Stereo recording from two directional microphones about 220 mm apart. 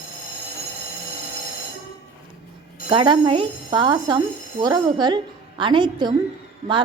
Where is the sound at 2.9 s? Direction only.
20° right (ahead or behind).